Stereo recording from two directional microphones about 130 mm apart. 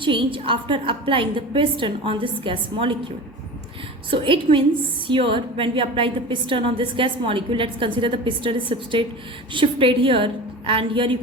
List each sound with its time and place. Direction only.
0.0 s a woman's voice: 40° right (ahead or behind)
4.1 s a woman's voice: 40° right (ahead or behind)